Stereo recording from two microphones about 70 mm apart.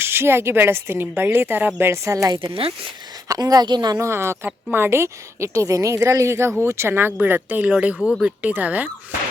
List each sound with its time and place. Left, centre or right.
0.0 s speech: right
2.0 s a woman's voice: right
3.9 s a woman's voice: right